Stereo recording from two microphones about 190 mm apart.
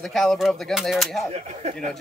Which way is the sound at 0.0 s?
Centre (ahead or behind).